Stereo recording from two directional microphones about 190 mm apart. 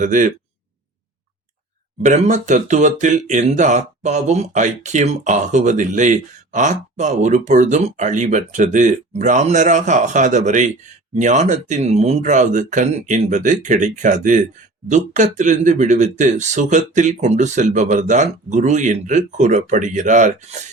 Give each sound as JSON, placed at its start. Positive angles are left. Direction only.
{"t": 0.0, "sound": "speech", "side_deg": -40}
{"t": 2.0, "sound": "speech", "side_deg": -35}